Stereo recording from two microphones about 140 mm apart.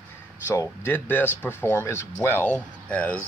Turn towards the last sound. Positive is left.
turn(degrees=10)  # may be behind; listen again after turning